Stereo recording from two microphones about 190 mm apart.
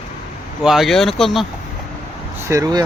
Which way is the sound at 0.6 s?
Centre (ahead or behind).